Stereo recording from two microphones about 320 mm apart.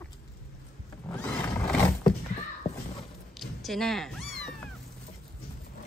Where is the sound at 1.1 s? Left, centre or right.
Centre.